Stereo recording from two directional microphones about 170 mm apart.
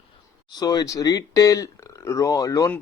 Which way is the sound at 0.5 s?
25° left (ahead or behind).